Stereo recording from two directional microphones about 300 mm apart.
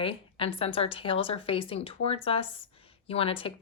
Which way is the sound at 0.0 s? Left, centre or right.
Centre.